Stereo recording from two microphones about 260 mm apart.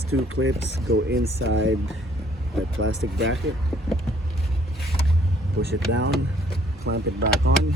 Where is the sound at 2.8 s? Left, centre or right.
Right.